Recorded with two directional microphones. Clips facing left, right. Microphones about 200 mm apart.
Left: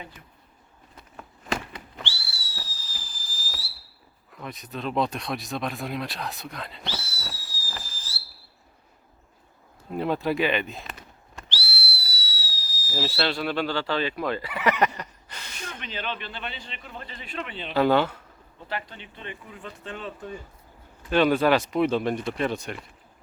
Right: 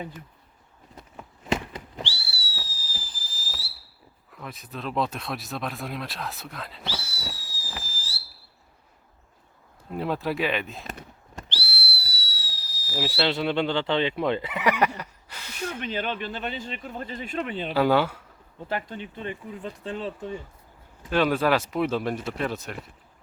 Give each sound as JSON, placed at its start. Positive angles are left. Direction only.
{"t": 1.7, "sound": "whistle", "side_deg": -35}
{"t": 2.6, "sound": "a sound", "side_deg": -30}
{"t": 4.4, "sound": "speech", "side_deg": 0}
{"t": 9.9, "sound": "speech", "side_deg": 0}
{"t": 10.8, "sound": "fireworks", "side_deg": -50}
{"t": 13.0, "sound": "speech", "side_deg": -15}
{"t": 15.8, "sound": "speech", "side_deg": -50}
{"t": 17.7, "sound": "speech", "side_deg": -10}
{"t": 18.7, "sound": "speech", "side_deg": -45}
{"t": 21.1, "sound": "speech", "side_deg": 0}